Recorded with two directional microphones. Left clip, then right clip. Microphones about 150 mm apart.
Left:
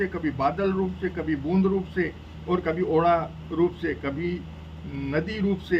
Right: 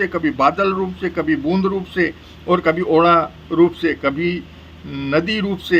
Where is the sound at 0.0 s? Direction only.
25° right (ahead or behind).